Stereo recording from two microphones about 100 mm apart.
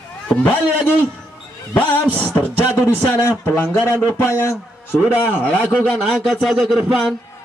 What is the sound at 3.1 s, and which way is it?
A man's voice, 25° left (ahead or behind).